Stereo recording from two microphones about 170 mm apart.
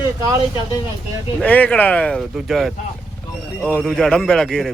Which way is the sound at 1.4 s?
10° left (ahead or behind).